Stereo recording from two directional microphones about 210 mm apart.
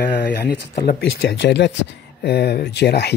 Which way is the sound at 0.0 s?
50° left (ahead or behind).